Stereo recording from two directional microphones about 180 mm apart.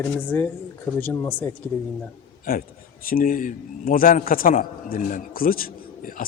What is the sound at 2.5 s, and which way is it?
A man's voice, 50° left (ahead or behind).